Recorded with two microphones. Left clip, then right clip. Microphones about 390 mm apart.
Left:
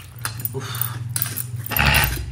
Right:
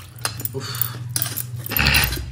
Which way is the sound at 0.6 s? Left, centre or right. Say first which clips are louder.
Even; centre.